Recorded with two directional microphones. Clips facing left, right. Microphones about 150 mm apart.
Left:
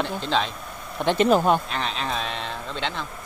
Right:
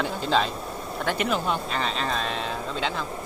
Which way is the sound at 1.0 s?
30° left (ahead or behind).